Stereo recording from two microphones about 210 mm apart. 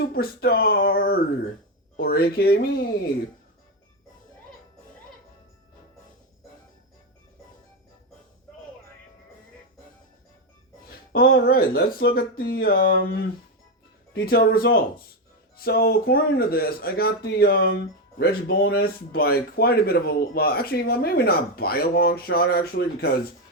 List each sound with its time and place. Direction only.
0.0 s speech: 45° left (ahead or behind)
11.1 s speech: 45° left (ahead or behind)
14.1 s speech: 45° left (ahead or behind)